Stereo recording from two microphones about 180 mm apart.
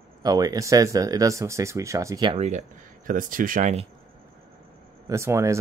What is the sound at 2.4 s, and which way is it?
Speech, 40° right (ahead or behind).